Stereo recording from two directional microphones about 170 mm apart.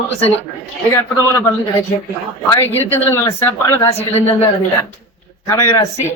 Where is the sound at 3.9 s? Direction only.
40° left (ahead or behind).